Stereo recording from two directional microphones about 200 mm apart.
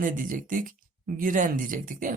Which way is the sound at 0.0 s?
40° right (ahead or behind).